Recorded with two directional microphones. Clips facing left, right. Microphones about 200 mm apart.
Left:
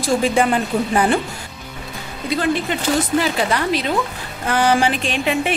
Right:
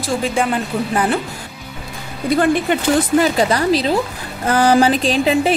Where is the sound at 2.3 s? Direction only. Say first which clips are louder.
Right 5 dB; 50° right (ahead or behind).